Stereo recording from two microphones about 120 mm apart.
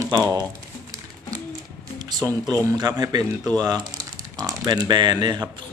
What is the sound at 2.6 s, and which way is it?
Speech, 35° right (ahead or behind).